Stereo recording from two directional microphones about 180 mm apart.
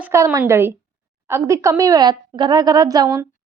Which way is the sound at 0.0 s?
10° right (ahead or behind).